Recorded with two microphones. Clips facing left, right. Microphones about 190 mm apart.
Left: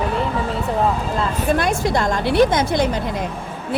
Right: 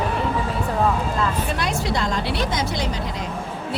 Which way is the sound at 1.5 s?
50° left (ahead or behind).